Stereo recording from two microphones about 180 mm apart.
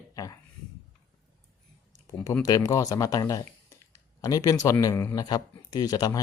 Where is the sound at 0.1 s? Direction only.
20° left (ahead or behind).